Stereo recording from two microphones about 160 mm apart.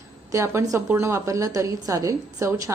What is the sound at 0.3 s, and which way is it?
A woman's voice, 15° right (ahead or behind).